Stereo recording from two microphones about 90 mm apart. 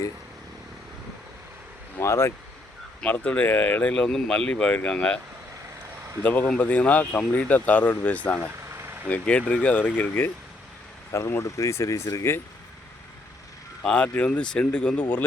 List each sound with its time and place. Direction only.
2.0 s speech: 30° left (ahead or behind)
3.0 s speech: 15° left (ahead or behind)
6.2 s speech: 20° left (ahead or behind)
8.7 s vehicle: 30° right (ahead or behind)
9.0 s speech: 15° left (ahead or behind)
11.1 s speech: 30° left (ahead or behind)
13.8 s speech: 15° left (ahead or behind)